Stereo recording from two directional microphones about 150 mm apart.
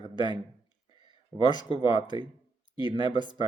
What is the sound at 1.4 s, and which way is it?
Speech, 30° left (ahead or behind).